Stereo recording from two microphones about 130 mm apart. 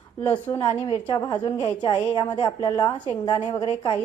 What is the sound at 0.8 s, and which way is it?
A woman's voice, 40° left (ahead or behind).